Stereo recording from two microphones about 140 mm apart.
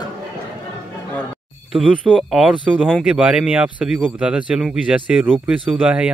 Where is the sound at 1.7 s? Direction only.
5° left (ahead or behind).